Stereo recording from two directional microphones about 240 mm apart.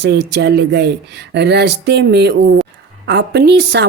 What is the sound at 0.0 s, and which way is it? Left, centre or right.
A woman's voice, right.